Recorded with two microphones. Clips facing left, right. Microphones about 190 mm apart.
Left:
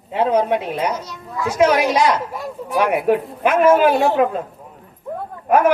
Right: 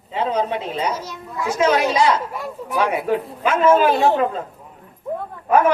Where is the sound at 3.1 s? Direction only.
65° left (ahead or behind).